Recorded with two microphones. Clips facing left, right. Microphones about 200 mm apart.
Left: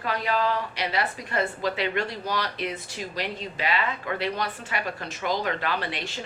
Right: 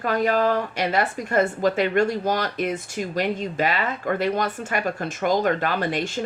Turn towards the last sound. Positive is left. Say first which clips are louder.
# right 7 dB
turn(degrees=-45)  # may be behind; listen again after turning